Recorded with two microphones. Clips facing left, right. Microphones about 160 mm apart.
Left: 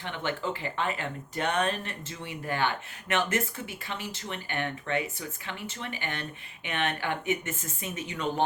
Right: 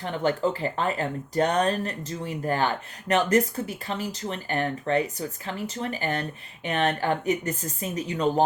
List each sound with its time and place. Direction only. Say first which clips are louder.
0.0 s speech: right 8 dB; 40° right (ahead or behind)